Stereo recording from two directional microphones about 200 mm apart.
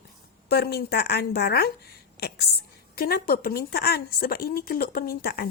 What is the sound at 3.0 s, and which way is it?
Speech, 50° left (ahead or behind).